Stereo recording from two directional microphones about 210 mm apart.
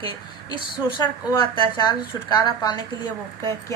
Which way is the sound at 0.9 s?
20° left (ahead or behind).